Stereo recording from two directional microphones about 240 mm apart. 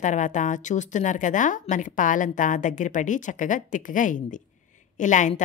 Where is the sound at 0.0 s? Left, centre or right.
Left.